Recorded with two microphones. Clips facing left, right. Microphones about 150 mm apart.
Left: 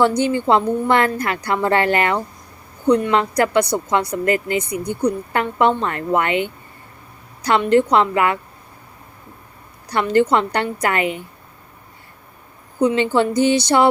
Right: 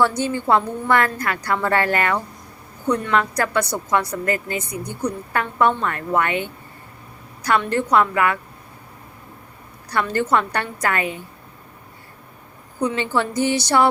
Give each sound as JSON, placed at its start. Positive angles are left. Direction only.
{"t": 0.0, "sound": "a woman's voice", "side_deg": 20}
{"t": 9.9, "sound": "a woman's voice", "side_deg": 20}
{"t": 12.8, "sound": "a woman's voice", "side_deg": 20}